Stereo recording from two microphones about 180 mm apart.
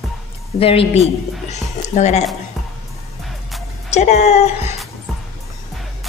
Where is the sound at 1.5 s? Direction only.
40° left (ahead or behind).